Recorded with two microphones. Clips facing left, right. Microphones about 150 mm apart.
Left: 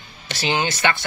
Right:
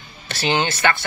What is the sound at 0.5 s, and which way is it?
Speech, 15° left (ahead or behind).